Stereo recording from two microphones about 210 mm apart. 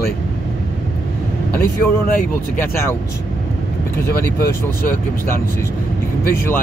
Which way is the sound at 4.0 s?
45° left (ahead or behind).